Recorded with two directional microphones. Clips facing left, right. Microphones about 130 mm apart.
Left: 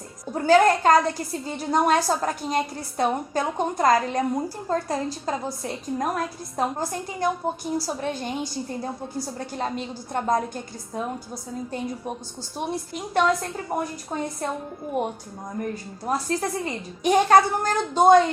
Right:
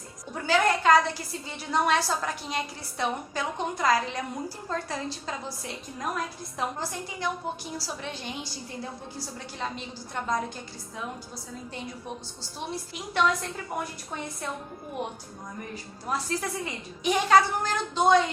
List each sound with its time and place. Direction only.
0.3 s a woman's voice: 45° left (ahead or behind)
12.5 s a woman's voice: 50° left (ahead or behind)
13.7 s a woman's voice: 35° left (ahead or behind)
15.7 s a woman's voice: 45° left (ahead or behind)